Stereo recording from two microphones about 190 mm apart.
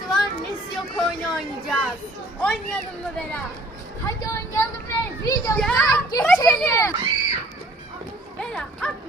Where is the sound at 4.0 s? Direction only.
15° left (ahead or behind).